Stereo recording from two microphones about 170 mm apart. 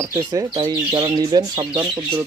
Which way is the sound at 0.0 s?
20° right (ahead or behind).